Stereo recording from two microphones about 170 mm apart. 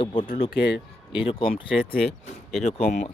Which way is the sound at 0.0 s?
30° left (ahead or behind).